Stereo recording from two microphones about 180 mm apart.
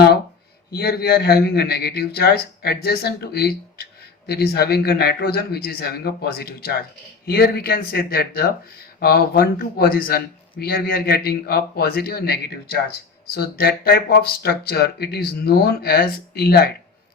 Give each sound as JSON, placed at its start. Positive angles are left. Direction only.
{"t": 0.7, "sound": "a man's voice", "side_deg": 60}